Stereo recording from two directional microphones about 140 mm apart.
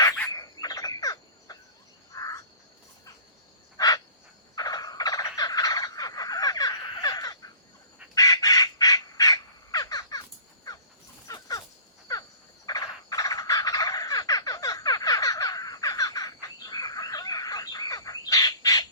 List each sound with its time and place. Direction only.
0.3 s cricket: 25° left (ahead or behind)
3.8 s crow: 25° left (ahead or behind)
4.5 s fowl: 25° left (ahead or behind)
8.1 s crow: 25° left (ahead or behind)
11.3 s a sound: 25° left (ahead or behind)
12.6 s frog: 25° left (ahead or behind)